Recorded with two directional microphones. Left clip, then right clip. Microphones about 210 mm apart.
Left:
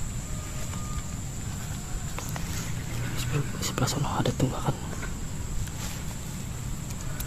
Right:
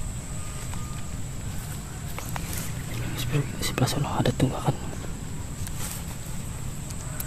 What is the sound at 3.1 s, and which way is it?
Whispering, 20° right (ahead or behind).